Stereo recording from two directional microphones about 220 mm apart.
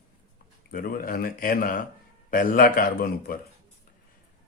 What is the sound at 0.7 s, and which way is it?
Speech, 40° left (ahead or behind).